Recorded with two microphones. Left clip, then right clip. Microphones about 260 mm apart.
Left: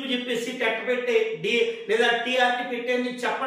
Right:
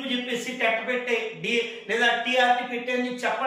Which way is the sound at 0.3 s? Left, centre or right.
Centre.